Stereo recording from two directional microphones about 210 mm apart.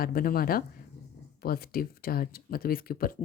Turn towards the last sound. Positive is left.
turn(degrees=45)  # may be behind; listen again after turning